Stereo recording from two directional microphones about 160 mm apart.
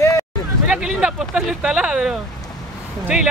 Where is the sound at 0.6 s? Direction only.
5° right (ahead or behind).